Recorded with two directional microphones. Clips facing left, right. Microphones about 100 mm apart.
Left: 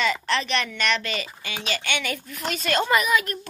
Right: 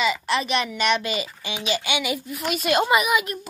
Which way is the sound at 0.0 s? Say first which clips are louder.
Right 1 dB; 10° right (ahead or behind).